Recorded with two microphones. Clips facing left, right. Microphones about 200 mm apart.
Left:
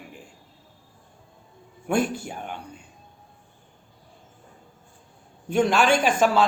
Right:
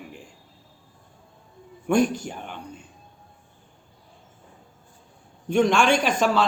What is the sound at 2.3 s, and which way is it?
Speech, 45° left (ahead or behind).